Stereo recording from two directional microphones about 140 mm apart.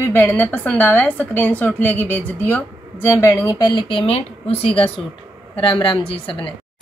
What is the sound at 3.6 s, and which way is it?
A woman's voice, 35° left (ahead or behind).